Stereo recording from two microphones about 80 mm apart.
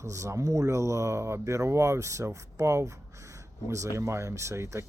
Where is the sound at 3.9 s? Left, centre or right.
Right.